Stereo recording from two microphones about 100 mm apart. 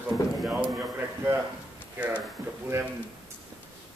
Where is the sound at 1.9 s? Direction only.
15° right (ahead or behind).